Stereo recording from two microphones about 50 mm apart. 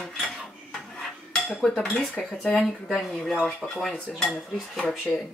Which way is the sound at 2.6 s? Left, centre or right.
Centre.